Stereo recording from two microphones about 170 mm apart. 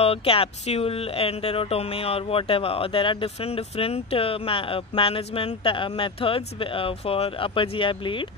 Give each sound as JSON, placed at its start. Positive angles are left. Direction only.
{"t": 0.0, "sound": "speech", "side_deg": 35}